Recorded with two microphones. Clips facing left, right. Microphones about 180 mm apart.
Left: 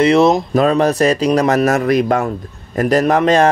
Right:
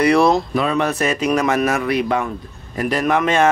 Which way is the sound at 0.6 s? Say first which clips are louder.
Left 6 dB; 40° left (ahead or behind).